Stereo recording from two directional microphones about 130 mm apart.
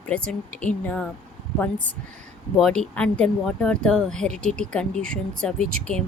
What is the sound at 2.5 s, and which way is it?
Speech, 5° left (ahead or behind).